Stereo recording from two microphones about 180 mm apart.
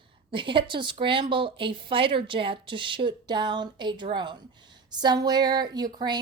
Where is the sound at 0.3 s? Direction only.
30° right (ahead or behind).